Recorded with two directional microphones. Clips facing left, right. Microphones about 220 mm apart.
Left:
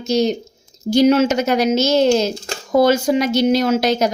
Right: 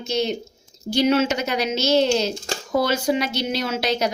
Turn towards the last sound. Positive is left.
turn(degrees=45)  # may be behind; listen again after turning